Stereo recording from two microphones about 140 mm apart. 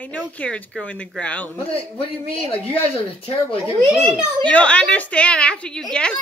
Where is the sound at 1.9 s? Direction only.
40° left (ahead or behind).